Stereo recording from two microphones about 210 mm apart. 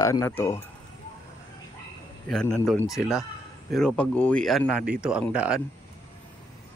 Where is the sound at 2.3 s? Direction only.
5° left (ahead or behind).